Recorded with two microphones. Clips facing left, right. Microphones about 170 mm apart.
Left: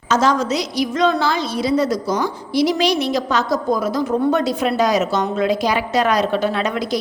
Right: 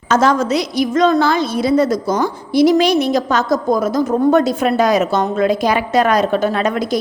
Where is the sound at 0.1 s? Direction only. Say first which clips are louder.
Right 3 dB; 55° right (ahead or behind).